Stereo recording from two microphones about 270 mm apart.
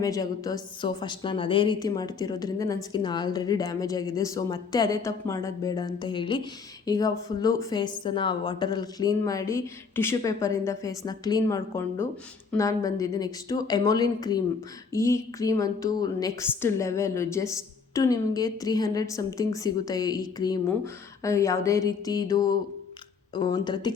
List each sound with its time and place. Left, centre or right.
0.0 s a woman's voice: centre